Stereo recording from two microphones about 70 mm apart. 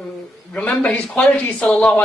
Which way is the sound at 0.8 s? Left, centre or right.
Centre.